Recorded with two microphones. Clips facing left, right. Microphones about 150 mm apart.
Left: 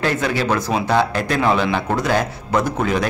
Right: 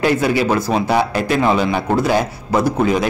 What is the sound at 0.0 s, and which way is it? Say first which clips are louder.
A man's voice: right 4 dB; 10° right (ahead or behind).